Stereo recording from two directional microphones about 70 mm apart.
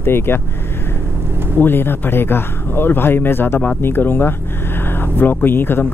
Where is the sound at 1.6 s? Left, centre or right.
Left.